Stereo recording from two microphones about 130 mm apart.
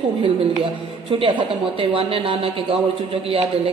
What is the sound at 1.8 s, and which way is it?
Speech, 45° right (ahead or behind).